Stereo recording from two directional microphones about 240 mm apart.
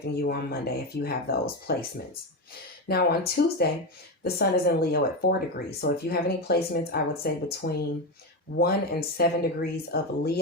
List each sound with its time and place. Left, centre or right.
0.2 s speech: left
2.8 s speech: left